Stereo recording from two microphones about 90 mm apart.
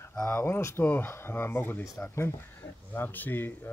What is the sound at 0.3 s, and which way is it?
Speech, 25° left (ahead or behind).